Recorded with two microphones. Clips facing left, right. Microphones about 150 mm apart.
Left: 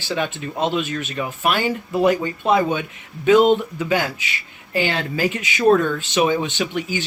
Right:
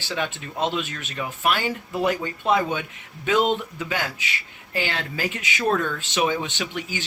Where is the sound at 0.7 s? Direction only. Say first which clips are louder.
Left 6 dB; 15° left (ahead or behind).